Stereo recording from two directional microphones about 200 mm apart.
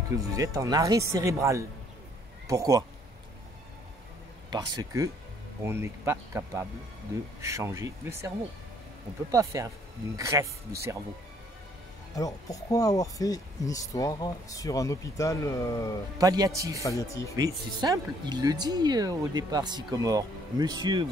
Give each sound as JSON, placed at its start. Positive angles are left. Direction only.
{"t": 0.3, "sound": "speech", "side_deg": -15}
{"t": 4.5, "sound": "speech", "side_deg": -20}
{"t": 9.3, "sound": "speech", "side_deg": -15}
{"t": 12.2, "sound": "speech", "side_deg": 15}
{"t": 16.2, "sound": "speech", "side_deg": -20}